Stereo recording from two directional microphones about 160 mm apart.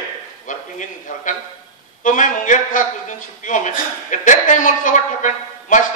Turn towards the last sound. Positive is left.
turn(degrees=50)  # may be behind; listen again after turning